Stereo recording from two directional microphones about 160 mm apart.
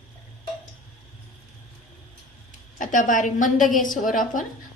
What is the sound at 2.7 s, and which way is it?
A woman's voice, 55° left (ahead or behind).